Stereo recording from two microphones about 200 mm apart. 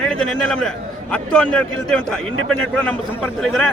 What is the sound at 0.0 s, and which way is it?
A man's voice, 5° left (ahead or behind).